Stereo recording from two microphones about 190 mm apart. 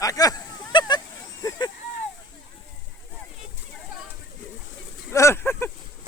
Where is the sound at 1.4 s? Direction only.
20° left (ahead or behind).